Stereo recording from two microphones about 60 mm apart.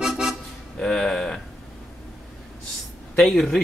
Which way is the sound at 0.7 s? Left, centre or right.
Centre.